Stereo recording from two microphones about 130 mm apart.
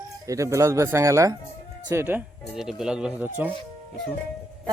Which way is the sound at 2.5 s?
5° right (ahead or behind).